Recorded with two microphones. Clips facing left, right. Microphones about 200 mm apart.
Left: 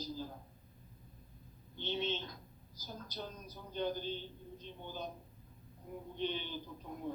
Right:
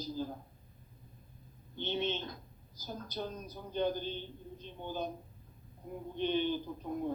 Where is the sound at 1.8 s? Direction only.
55° right (ahead or behind).